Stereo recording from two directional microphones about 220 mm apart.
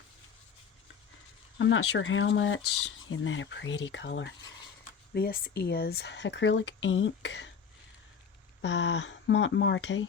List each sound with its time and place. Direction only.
1.5 s speech: 60° left (ahead or behind)
5.1 s speech: 45° left (ahead or behind)
8.6 s speech: 55° left (ahead or behind)